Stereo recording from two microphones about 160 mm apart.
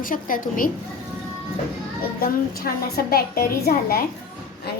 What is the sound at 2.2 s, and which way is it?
A woman's voice, 70° left (ahead or behind).